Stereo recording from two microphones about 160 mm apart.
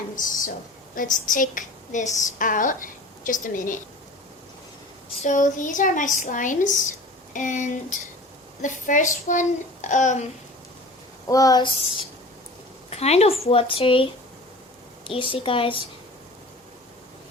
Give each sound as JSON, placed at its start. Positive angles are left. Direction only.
{"t": 0.2, "sound": "speech", "side_deg": 55}
{"t": 5.2, "sound": "speech", "side_deg": 55}
{"t": 11.3, "sound": "speech", "side_deg": 20}